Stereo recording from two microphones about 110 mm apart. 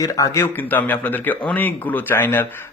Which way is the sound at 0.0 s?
30° left (ahead or behind).